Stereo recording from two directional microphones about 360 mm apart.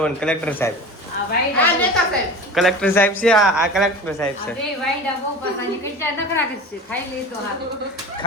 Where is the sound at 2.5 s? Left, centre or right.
Centre.